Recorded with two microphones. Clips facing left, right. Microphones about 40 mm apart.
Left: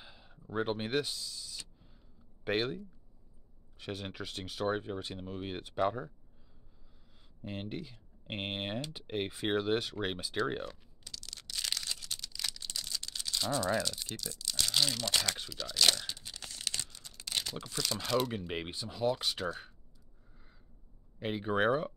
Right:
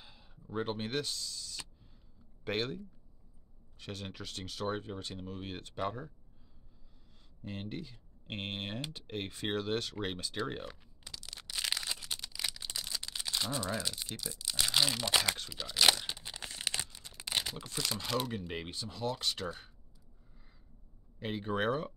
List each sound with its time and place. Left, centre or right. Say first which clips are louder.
0.0 s a sound: left 3 dB; centre
2.4 s speech: left 3 dB; centre
3.8 s speech: left 3 dB; centre
7.4 s speech: left 1 dB; centre
11.1 s a sound: even; centre
13.7 s speech: left 3 dB; centre
15.5 s tearing: right 1 dB; centre
17.9 s speech: left 5 dB; centre
18.5 s speech: left 2 dB; centre
21.2 s speech: left 3 dB; centre